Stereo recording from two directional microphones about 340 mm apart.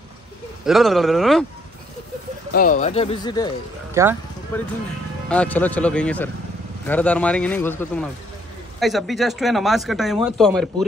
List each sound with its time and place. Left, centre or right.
0.7 s speech: centre
2.5 s speech: left
3.9 s speech: centre
4.5 s speech: centre